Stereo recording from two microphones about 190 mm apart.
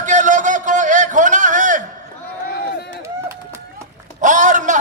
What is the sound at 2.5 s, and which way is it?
Run, 55° left (ahead or behind).